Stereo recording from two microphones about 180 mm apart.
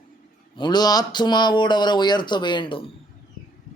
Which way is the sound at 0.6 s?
25° left (ahead or behind).